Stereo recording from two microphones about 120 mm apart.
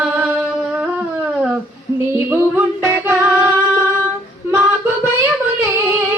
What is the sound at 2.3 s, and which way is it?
Music, 20° right (ahead or behind).